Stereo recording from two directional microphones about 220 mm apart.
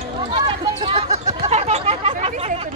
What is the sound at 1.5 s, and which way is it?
Chatter, 30° right (ahead or behind).